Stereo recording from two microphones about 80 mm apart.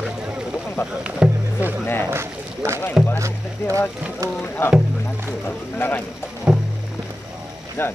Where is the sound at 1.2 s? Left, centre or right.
Centre.